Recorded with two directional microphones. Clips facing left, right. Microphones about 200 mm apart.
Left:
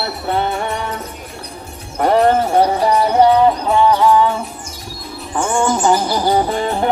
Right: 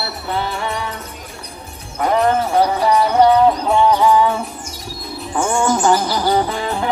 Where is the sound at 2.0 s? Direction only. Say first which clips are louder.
Left 3 dB; 35° left (ahead or behind).